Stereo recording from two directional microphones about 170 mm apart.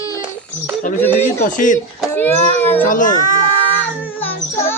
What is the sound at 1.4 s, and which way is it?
Speech, 50° left (ahead or behind).